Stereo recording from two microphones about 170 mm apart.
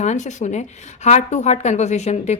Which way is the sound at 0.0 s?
45° left (ahead or behind).